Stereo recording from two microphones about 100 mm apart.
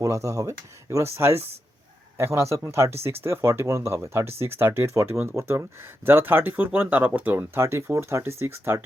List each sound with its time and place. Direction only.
0.0 s speech: 30° right (ahead or behind)